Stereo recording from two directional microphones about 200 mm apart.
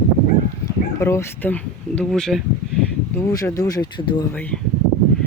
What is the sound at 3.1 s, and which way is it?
Speech, 15° left (ahead or behind).